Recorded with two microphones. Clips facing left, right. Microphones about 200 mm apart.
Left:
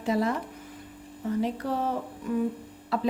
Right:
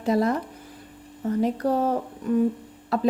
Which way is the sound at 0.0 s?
40° right (ahead or behind).